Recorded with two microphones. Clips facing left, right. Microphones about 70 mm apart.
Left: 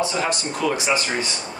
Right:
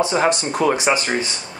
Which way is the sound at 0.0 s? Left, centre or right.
Right.